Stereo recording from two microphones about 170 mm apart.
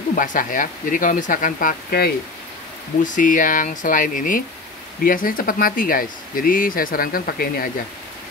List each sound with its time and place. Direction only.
0.1 s speech: 50° left (ahead or behind)
3.0 s speech: 50° left (ahead or behind)